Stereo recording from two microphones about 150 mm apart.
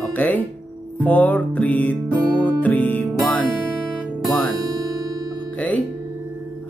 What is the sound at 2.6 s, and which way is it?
Music, 10° left (ahead or behind).